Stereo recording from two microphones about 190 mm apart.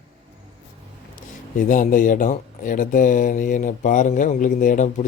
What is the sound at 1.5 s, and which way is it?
Speech, 45° left (ahead or behind).